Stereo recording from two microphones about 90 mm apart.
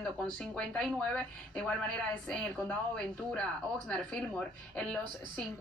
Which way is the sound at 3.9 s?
10° left (ahead or behind).